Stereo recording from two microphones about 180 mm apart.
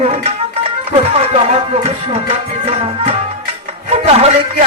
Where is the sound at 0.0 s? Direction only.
35° right (ahead or behind).